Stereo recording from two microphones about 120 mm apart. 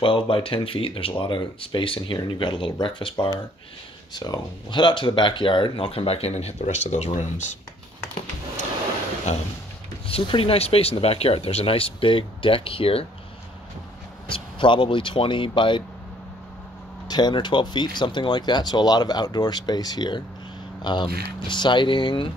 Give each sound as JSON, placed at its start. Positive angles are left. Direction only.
{"t": 0.0, "sound": "speech", "side_deg": 45}
{"t": 10.0, "sound": "speech", "side_deg": 50}
{"t": 14.2, "sound": "speech", "side_deg": 45}
{"t": 17.1, "sound": "speech", "side_deg": 35}